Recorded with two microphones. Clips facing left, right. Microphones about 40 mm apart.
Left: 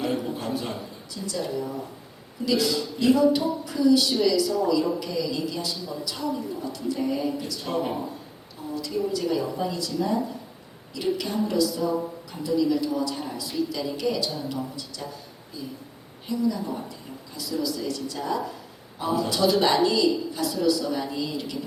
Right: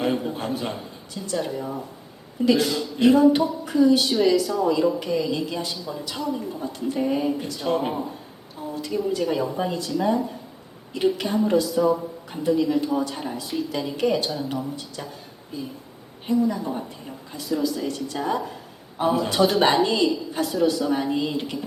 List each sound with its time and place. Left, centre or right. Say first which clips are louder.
0.2 s a woman's voice: right 2 dB; right
16.2 s a woman's voice: right 4 dB; right